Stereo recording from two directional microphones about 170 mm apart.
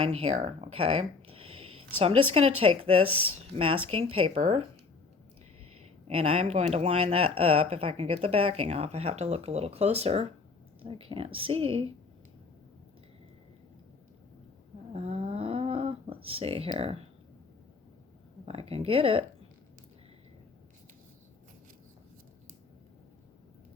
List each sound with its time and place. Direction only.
0.0 s speech: 35° right (ahead or behind)
6.1 s speech: 35° right (ahead or behind)
14.9 s snoring: 35° right (ahead or behind)
18.4 s speech: 35° right (ahead or behind)